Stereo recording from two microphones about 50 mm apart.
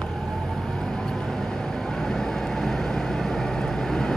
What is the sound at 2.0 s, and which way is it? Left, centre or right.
Vehicle, centre.